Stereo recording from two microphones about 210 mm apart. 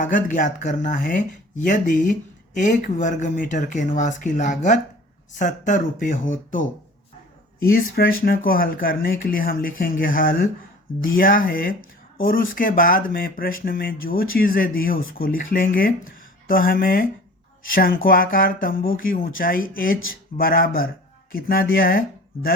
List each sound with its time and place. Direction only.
0.0 s speech: 40° left (ahead or behind)